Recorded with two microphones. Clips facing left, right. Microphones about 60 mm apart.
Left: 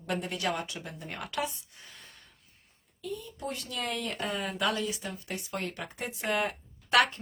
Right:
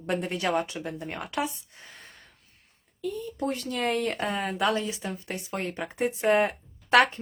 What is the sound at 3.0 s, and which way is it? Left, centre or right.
Speech, right.